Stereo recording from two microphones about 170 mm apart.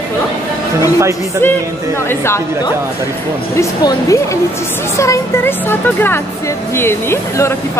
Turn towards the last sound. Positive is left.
turn(degrees=15)  # may be behind; listen again after turning